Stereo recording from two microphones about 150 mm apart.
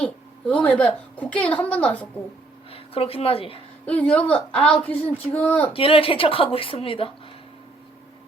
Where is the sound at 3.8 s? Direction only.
10° left (ahead or behind).